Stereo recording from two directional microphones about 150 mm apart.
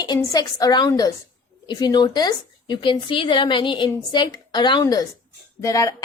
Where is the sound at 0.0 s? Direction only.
25° left (ahead or behind).